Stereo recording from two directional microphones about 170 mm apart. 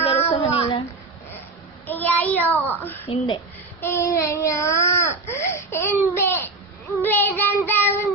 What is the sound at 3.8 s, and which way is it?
Child singing, 15° left (ahead or behind).